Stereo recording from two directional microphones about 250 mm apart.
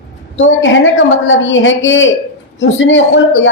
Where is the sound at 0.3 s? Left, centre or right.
Left.